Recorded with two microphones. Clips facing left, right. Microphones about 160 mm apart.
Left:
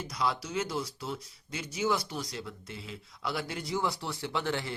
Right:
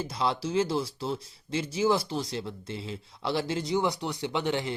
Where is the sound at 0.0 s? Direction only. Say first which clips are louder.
Right 3 dB; 25° right (ahead or behind).